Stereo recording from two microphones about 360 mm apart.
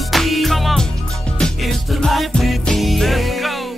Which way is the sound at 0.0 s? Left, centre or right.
Centre.